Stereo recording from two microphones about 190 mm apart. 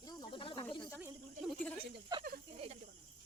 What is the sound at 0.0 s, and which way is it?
Snake, 20° left (ahead or behind).